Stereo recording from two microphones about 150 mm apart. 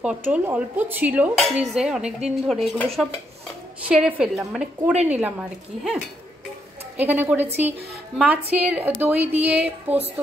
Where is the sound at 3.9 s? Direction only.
10° right (ahead or behind).